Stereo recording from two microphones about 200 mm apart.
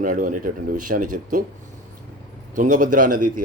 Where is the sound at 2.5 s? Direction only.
40° right (ahead or behind).